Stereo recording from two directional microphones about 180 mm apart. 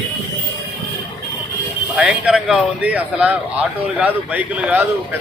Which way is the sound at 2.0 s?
5° right (ahead or behind).